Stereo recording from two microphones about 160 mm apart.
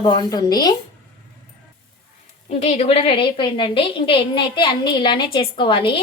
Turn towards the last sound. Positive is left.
turn(degrees=30)  # may be behind; listen again after turning